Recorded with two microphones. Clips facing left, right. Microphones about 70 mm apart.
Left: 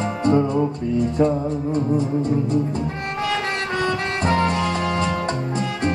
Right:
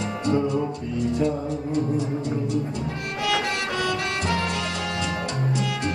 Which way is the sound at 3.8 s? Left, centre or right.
Left.